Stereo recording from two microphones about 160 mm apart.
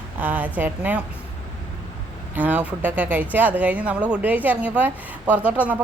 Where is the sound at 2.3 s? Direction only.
10° right (ahead or behind).